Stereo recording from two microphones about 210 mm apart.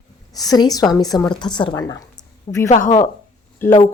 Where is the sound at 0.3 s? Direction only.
20° left (ahead or behind).